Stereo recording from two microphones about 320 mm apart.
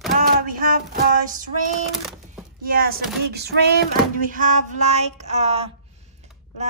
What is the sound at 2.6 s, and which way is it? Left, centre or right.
Speech, right.